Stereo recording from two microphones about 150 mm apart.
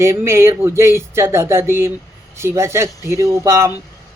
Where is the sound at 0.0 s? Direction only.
20° right (ahead or behind).